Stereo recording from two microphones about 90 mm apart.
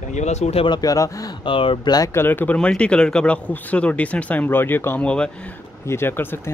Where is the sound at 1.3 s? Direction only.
70° left (ahead or behind).